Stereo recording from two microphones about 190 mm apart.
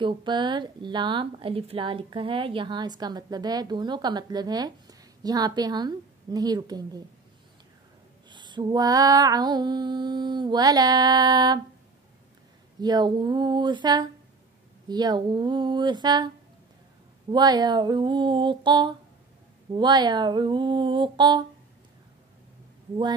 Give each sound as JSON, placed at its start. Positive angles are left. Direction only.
{"t": 0.0, "sound": "speech", "side_deg": -25}
{"t": 8.3, "sound": "speech", "side_deg": -25}
{"t": 12.8, "sound": "speech", "side_deg": -20}
{"t": 17.3, "sound": "speech", "side_deg": -20}